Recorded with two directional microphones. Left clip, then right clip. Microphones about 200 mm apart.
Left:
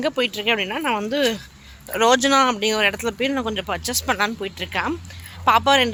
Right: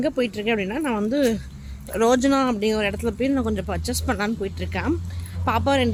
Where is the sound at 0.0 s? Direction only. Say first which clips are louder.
Left 2 dB; 5° right (ahead or behind).